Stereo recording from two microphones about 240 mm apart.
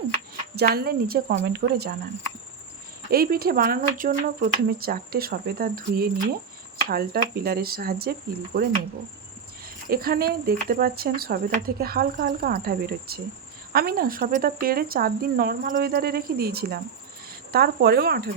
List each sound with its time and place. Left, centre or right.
0.5 s speech: right
3.1 s speech: right
9.9 s speech: right